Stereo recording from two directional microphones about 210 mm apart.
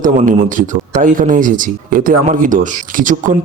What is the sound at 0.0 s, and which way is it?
Speech, 40° right (ahead or behind).